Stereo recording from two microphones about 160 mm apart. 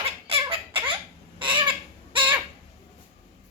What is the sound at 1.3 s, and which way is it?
Chicken, 30° right (ahead or behind).